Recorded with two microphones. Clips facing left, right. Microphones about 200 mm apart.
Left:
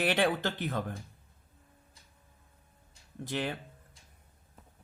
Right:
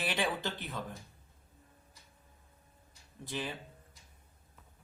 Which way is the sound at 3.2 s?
70° left (ahead or behind).